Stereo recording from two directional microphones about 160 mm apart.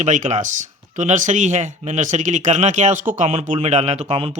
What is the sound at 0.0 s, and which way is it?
Speech, 50° right (ahead or behind).